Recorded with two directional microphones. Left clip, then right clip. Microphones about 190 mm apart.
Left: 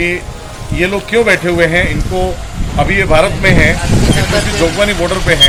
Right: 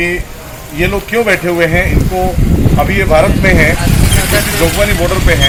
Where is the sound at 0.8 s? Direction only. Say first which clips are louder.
Left 1 dB; 15° left (ahead or behind).